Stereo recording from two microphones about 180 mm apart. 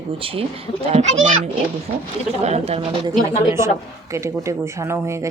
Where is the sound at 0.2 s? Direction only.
30° right (ahead or behind).